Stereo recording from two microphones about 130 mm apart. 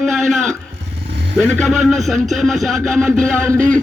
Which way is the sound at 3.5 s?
90° right.